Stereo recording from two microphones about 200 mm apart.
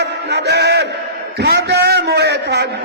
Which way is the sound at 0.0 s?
60° right (ahead or behind).